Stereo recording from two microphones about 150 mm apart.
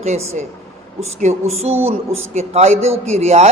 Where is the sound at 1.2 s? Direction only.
45° right (ahead or behind).